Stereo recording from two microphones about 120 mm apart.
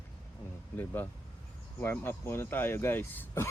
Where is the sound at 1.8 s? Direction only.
20° left (ahead or behind).